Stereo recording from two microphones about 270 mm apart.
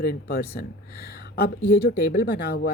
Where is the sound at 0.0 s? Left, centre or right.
Left.